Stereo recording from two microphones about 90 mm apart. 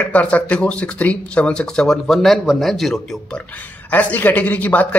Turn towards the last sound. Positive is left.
turn(degrees=15)  # may be behind; listen again after turning